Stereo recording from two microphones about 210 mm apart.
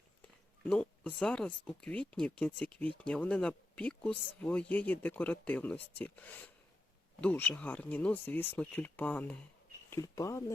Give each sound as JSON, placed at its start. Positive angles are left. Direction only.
{"t": 0.6, "sound": "speech", "side_deg": 5}